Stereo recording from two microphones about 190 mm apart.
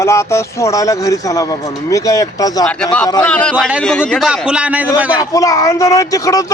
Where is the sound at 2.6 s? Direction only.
5° left (ahead or behind).